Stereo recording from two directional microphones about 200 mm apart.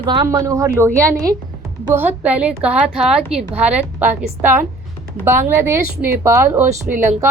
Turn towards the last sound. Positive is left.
turn(degrees=-40)  # may be behind; listen again after turning